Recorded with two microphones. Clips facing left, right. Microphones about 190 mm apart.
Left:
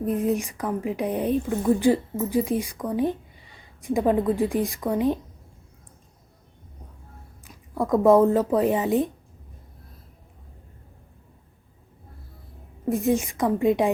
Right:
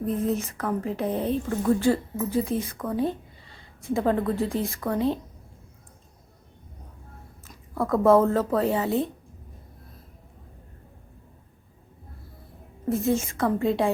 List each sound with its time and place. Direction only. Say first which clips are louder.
0.2 s a woman's voice: left 2 dB; 15° left (ahead or behind)
7.4 s speech: left 1 dB; 15° left (ahead or behind)
12.9 s a woman's voice: left 2 dB; 15° left (ahead or behind)